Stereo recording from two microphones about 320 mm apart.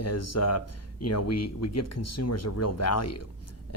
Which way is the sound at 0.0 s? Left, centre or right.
Left.